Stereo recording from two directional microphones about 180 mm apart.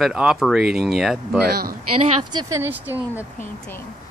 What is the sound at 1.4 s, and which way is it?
Speech, 60° right (ahead or behind).